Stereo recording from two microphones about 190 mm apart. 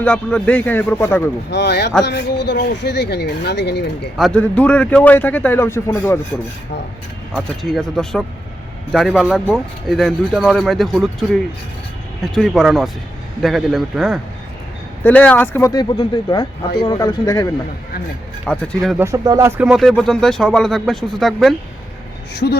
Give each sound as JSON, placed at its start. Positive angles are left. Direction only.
{"t": 0.0, "sound": "a man's voice", "side_deg": 5}
{"t": 1.5, "sound": "speech", "side_deg": 65}
{"t": 4.2, "sound": "a man's voice", "side_deg": 5}
{"t": 7.3, "sound": "a man's voice", "side_deg": 0}
{"t": 18.4, "sound": "speech", "side_deg": 5}
{"t": 18.9, "sound": "speech", "side_deg": -15}
{"t": 19.6, "sound": "speech", "side_deg": 0}
{"t": 22.4, "sound": "speech", "side_deg": 50}